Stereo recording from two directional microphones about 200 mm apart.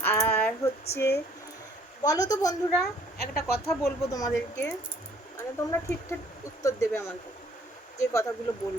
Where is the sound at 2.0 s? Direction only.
15° left (ahead or behind).